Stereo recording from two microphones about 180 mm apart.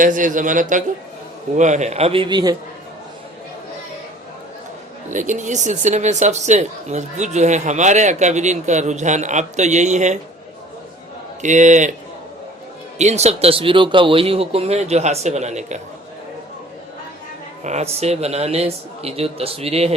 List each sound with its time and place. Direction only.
0.0 s a man's voice: 45° right (ahead or behind); by 2.6 s 25° right (ahead or behind)
5.1 s speech: 45° right (ahead or behind)
11.4 s speech: 40° right (ahead or behind)
13.0 s speech: 40° right (ahead or behind)
17.6 s speech: 40° right (ahead or behind)